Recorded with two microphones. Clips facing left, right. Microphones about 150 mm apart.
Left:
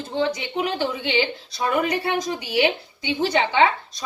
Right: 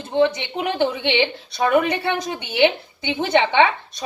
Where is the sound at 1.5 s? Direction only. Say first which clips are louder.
Right 6 dB; 65° right (ahead or behind).